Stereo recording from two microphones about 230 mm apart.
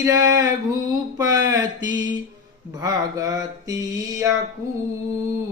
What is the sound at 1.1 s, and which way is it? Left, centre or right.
Speech, centre.